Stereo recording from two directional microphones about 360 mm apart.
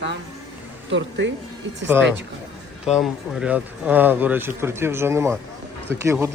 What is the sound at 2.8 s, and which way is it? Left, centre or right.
Speech, centre.